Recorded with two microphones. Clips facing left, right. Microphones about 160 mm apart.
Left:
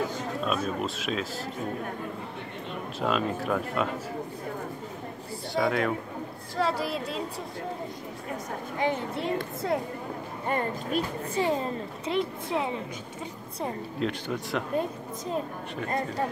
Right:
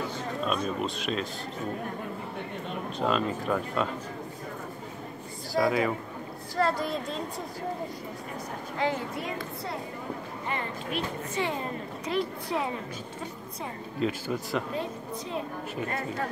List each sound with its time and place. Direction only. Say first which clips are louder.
0.4 s speech: even; centre (ahead or behind)
3.0 s speech: even; centre (ahead or behind)
5.5 s speech: right 1 dB; centre (ahead or behind)
8.7 s a woman's voice: left 1 dB; 20° left (ahead or behind)
10.5 s speech: left 5 dB; 45° left (ahead or behind)
12.1 s a woman's voice: left 1 dB; 20° left (ahead or behind)
13.9 s speech: right 4 dB; centre (ahead or behind)